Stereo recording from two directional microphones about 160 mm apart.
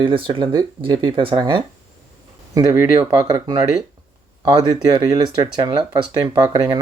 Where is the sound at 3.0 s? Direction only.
20° right (ahead or behind).